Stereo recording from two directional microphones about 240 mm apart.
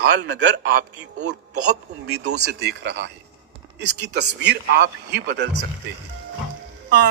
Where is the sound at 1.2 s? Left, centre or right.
Right.